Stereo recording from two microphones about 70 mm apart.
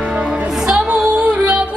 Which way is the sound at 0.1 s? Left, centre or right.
Centre.